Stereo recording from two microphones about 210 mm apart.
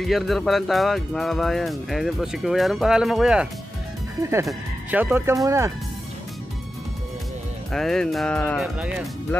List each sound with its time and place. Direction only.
0.0 s speech: centre (ahead or behind); by 5.7 s 15° right (ahead or behind)
7.7 s speech: centre (ahead or behind)